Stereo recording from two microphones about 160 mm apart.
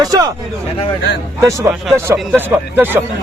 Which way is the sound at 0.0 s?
25° right (ahead or behind).